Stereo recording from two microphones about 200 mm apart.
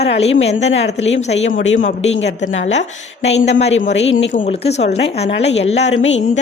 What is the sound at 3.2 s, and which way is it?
Speech, 35° left (ahead or behind).